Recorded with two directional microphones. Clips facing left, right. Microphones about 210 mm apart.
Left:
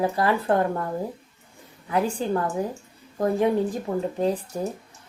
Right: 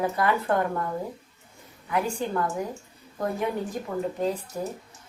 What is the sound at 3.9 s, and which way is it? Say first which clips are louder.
Speech: left 3 dB; 30° left (ahead or behind).